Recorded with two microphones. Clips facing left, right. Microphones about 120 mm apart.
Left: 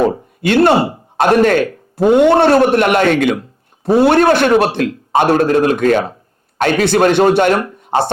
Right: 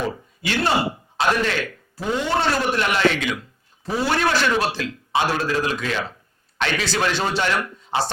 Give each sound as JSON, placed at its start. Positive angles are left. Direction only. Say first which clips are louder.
{"t": 0.1, "sound": "speech", "louder": "left 12 dB", "side_deg": 55}
{"t": 2.0, "sound": "a man's voice", "louder": "left 13 dB", "side_deg": 60}
{"t": 7.8, "sound": "a sound", "louder": "left 8 dB", "side_deg": 60}